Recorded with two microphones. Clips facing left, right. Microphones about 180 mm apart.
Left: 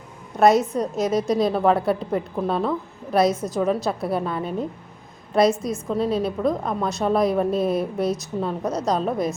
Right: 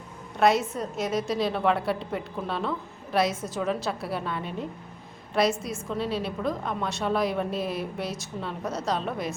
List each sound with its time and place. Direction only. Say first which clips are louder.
0.3 s a woman's voice: left 6 dB; 45° left (ahead or behind)